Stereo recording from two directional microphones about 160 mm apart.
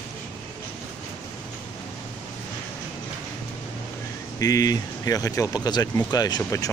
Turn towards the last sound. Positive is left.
turn(degrees=25)  # may be behind; listen again after turning